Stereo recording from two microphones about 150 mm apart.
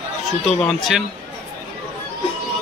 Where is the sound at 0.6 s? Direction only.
Centre (ahead or behind).